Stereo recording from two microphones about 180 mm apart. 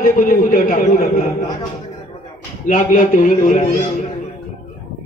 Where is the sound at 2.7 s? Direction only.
45° left (ahead or behind).